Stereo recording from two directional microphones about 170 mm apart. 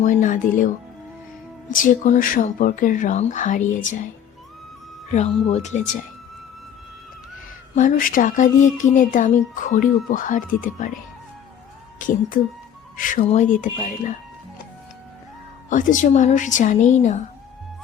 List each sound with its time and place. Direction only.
0.0 s speech: 50° left (ahead or behind)
1.7 s speech: 50° left (ahead or behind)
5.1 s speech: 40° left (ahead or behind)
7.8 s speech: 50° left (ahead or behind)
15.7 s speech: 50° left (ahead or behind)